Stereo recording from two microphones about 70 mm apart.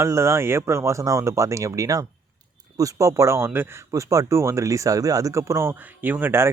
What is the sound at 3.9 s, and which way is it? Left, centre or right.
Speech, right.